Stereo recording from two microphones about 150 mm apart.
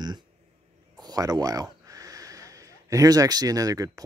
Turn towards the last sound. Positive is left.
turn(degrees=-25)  # may be behind; listen again after turning